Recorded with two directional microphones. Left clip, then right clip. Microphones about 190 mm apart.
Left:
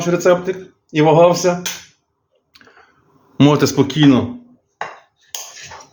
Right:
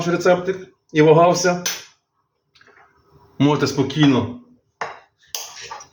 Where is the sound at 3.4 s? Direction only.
45° left (ahead or behind).